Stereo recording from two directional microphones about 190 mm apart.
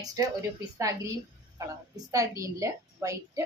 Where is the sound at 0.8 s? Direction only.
15° right (ahead or behind).